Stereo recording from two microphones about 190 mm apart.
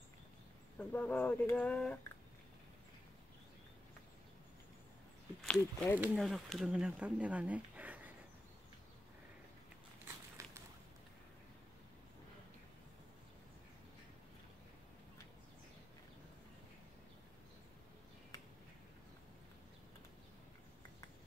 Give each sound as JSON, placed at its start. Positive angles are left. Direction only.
{"t": 0.7, "sound": "speech", "side_deg": 5}
{"t": 5.4, "sound": "speech", "side_deg": 5}
{"t": 10.4, "sound": "a sound", "side_deg": -15}
{"t": 18.3, "sound": "finger snapping", "side_deg": 20}